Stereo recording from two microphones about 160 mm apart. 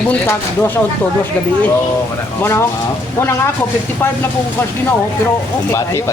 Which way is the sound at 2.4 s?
15° left (ahead or behind).